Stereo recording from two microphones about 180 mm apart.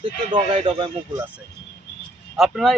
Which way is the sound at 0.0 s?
25° right (ahead or behind).